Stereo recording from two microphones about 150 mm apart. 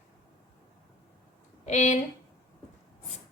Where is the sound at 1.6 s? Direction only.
50° left (ahead or behind).